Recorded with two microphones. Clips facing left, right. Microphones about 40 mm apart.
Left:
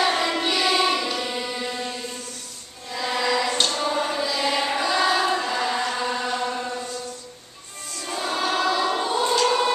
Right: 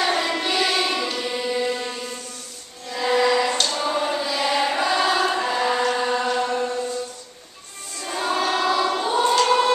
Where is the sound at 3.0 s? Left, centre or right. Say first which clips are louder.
Right 4 dB; centre.